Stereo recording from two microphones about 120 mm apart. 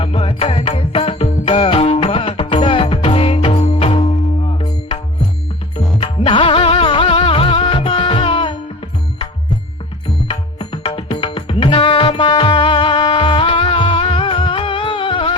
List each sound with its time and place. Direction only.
0.0 s music: 55° left (ahead or behind)
3.6 s music: 60° left (ahead or behind)
6.0 s music: 45° left (ahead or behind)
10.2 s music: 45° left (ahead or behind)